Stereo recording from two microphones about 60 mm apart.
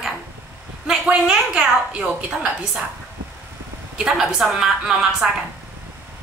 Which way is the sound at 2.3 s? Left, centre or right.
Centre.